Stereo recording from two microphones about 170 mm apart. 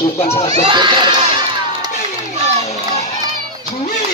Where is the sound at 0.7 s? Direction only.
30° right (ahead or behind).